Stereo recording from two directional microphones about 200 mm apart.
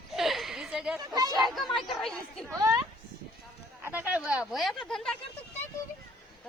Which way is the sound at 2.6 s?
15° right (ahead or behind).